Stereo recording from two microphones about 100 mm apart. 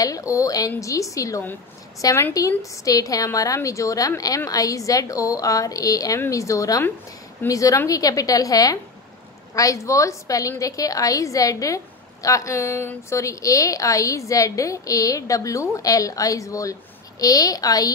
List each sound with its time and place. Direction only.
0.0 s a woman's voice: 35° left (ahead or behind)